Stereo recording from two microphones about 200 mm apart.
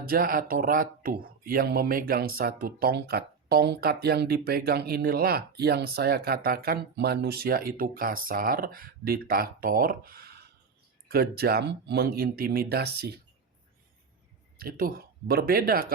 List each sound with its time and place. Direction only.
0.0 s speech: 45° right (ahead or behind)
14.6 s speech: 45° right (ahead or behind)